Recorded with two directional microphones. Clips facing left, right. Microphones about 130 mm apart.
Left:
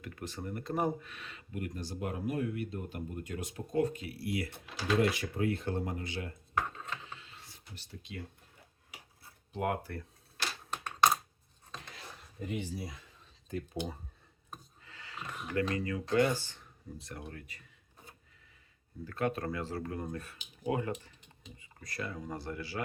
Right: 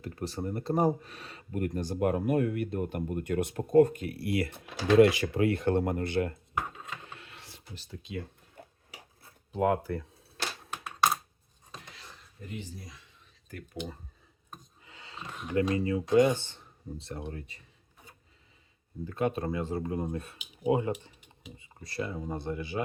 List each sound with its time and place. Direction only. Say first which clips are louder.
0.0 s speech: right 6 dB; 35° right (ahead or behind); by 6.3 s 60° right (ahead or behind)
6.5 s a sound: even; 10° right (ahead or behind)
7.0 s a sound: right 2 dB; 60° right (ahead or behind); by 7.6 s 75° right (ahead or behind)
8.6 s dishes: right 14 dB; 60° right (ahead or behind)
10.7 s computer keyboard: left 1 dB; 5° right (ahead or behind)
12.4 s speech: left 5 dB; 90° left
13.5 s speech: left 3 dB; 25° left (ahead or behind)
14.8 s a sound: right 1 dB; 20° right (ahead or behind)
15.4 s speech: right 5 dB; 20° right (ahead or behind)
19.0 s speech: right 4 dB; 20° right (ahead or behind)